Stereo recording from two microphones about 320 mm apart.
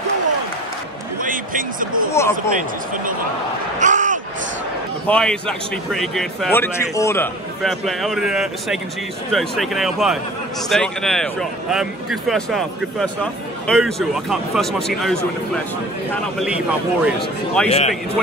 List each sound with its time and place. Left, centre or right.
1.2 s speech: right
2.1 s speech: centre
3.8 s a sound: right
5.0 s speech: centre
17.6 s speech: centre